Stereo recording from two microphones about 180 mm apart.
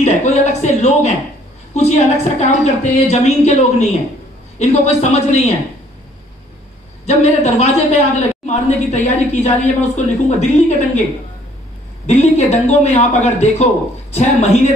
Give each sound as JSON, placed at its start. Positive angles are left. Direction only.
{"t": 0.0, "sound": "speech", "side_deg": 40}
{"t": 4.6, "sound": "speech", "side_deg": 40}
{"t": 7.1, "sound": "speech", "side_deg": 35}
{"t": 12.1, "sound": "speech", "side_deg": 40}